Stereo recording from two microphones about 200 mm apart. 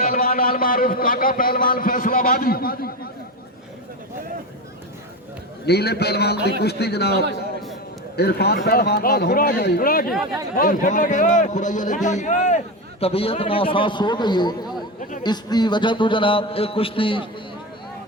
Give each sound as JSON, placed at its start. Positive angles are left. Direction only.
{"t": 0.0, "sound": "a man's voice", "side_deg": 45}
{"t": 5.6, "sound": "a man's voice", "side_deg": 55}